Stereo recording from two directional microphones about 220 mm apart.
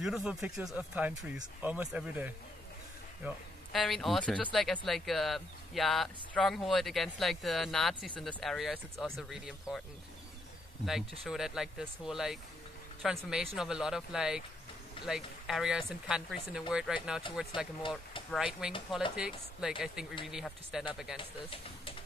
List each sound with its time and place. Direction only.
0.0 s speech: centre (ahead or behind)
3.7 s speech: centre (ahead or behind)
10.9 s speech: centre (ahead or behind)
18.3 s speech: 5° right (ahead or behind)
21.2 s speech: 25° left (ahead or behind)